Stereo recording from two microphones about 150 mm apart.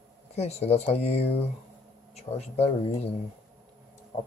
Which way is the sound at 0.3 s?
45° left (ahead or behind).